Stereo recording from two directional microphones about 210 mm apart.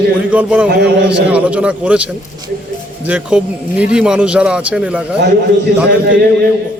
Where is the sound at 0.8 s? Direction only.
50° right (ahead or behind).